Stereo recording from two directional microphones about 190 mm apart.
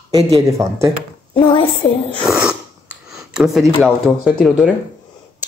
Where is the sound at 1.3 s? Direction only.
25° left (ahead or behind).